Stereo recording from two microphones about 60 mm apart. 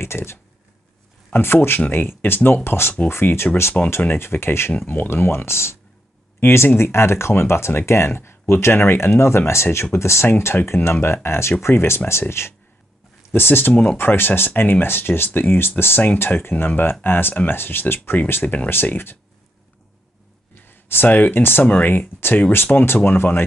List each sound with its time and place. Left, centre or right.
0.0 s speech: left
3.8 s speech: centre
4.1 s speech: left
4.7 s speech: left
10.2 s speech: left
20.5 s speech: left